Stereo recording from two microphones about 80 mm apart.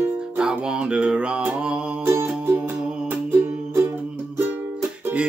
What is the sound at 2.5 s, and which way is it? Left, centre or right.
Music, centre.